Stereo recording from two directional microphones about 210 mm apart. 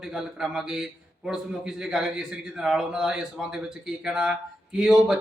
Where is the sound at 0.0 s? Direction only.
5° right (ahead or behind).